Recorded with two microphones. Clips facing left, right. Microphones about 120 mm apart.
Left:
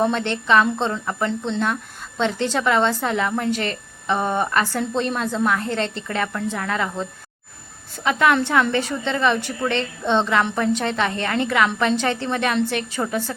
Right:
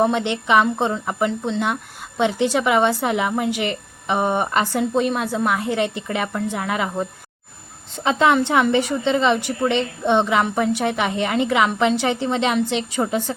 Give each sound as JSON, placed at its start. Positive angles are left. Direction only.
{"t": 0.0, "sound": "a woman's voice", "side_deg": -15}